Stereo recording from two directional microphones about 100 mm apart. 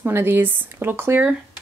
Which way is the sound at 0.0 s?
25° right (ahead or behind).